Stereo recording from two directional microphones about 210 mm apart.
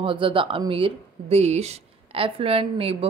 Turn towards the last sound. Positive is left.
turn(degrees=-25)  # may be behind; listen again after turning